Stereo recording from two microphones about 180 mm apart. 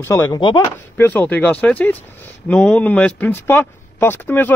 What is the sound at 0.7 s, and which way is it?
Speech, 10° left (ahead or behind).